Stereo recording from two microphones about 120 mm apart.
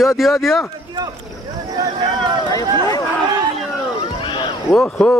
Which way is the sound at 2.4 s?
30° left (ahead or behind).